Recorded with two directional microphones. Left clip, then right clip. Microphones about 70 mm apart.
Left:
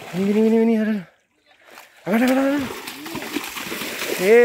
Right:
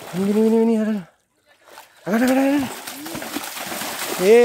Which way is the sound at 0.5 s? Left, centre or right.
Right.